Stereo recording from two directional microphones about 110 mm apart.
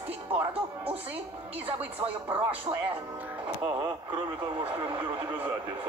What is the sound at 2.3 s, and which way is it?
Speech, 15° right (ahead or behind).